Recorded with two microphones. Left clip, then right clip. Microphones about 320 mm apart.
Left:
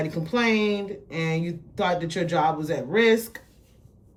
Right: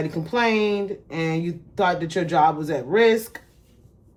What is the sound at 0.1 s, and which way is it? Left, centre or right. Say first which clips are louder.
Speech: right 4 dB; centre.